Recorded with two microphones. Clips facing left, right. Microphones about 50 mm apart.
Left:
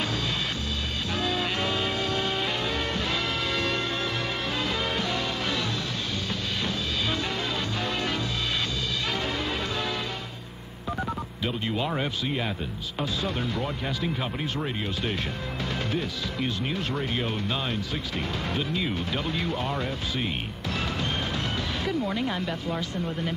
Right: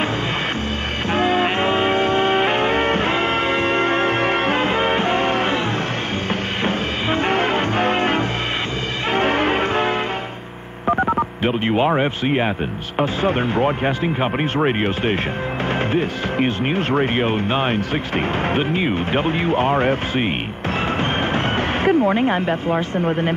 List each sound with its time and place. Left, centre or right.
1.1 s music: right
6.6 s music: right
10.9 s telephone dialing: right
13.0 s speech: right
21.0 s a sound: right